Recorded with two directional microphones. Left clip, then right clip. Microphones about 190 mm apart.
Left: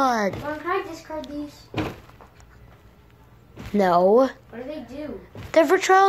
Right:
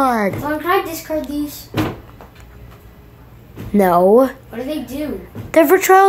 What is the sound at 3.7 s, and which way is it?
Speech, centre (ahead or behind).